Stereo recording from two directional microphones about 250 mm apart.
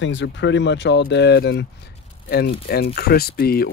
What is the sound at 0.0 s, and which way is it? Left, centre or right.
Speech, left.